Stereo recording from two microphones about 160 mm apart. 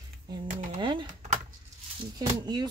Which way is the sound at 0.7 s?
30° right (ahead or behind).